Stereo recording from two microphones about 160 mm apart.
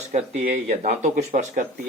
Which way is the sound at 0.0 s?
45° right (ahead or behind).